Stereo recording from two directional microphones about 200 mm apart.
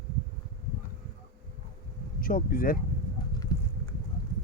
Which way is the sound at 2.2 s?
45° left (ahead or behind).